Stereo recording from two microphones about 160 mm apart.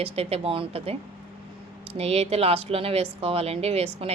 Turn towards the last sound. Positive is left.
turn(degrees=-40)  # may be behind; listen again after turning